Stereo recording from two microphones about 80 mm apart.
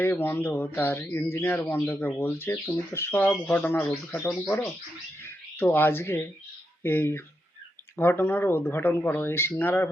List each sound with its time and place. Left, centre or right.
0.0 s speech: left